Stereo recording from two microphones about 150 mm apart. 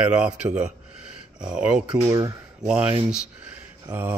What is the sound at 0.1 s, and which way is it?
A man's voice, 5° right (ahead or behind).